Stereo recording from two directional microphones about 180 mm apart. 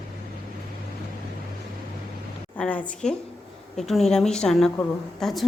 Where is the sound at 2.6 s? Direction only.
5° left (ahead or behind).